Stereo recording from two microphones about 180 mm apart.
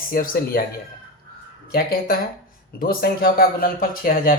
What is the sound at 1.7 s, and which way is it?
Speech, 55° left (ahead or behind).